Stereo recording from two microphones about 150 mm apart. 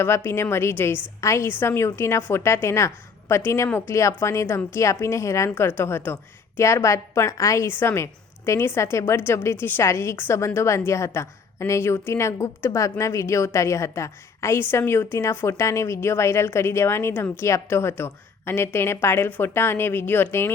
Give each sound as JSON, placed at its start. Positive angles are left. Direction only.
{"t": 0.0, "sound": "a woman's voice", "side_deg": 15}